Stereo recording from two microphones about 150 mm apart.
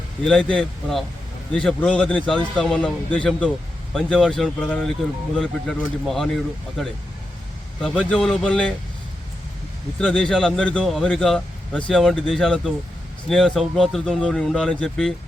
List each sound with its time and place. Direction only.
0.3 s a man's voice: 5° left (ahead or behind)
10.0 s speech: 5° left (ahead or behind)